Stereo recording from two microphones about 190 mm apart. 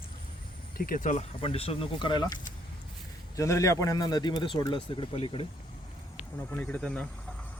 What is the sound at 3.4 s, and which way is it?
Speech, 15° left (ahead or behind).